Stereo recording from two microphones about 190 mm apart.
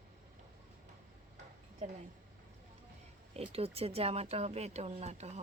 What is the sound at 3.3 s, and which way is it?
Speech, 30° right (ahead or behind).